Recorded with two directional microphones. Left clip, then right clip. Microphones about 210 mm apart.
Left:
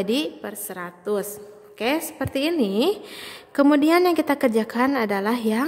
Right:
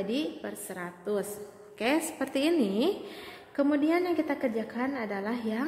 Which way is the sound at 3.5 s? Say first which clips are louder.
Left 9 dB; 40° left (ahead or behind).